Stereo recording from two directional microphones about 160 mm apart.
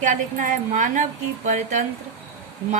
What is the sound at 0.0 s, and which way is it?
A woman's voice, 55° right (ahead or behind).